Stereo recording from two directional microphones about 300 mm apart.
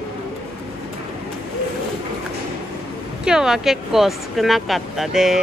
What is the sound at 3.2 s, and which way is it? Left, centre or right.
Speech, centre.